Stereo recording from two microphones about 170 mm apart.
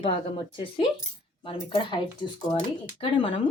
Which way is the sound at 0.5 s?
30° left (ahead or behind).